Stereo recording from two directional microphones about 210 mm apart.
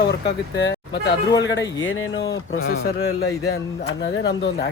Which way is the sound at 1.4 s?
55° left (ahead or behind).